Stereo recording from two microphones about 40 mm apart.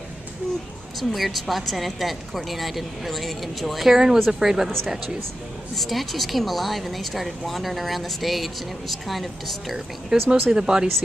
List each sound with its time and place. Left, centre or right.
1.1 s speech: centre
5.8 s speech: centre
10.5 s speech: centre